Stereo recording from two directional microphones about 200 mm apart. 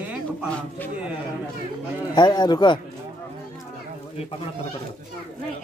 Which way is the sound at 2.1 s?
20° left (ahead or behind).